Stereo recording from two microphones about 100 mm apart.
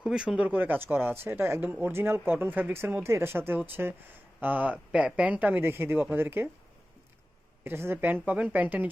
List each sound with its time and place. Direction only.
0.0 s speech: 10° right (ahead or behind)
7.6 s speech: 25° right (ahead or behind)